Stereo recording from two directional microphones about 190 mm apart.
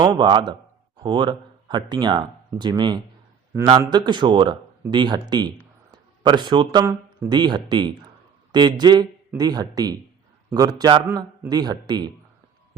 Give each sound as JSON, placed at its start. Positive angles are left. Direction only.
{"t": 0.0, "sound": "a man's voice", "side_deg": -25}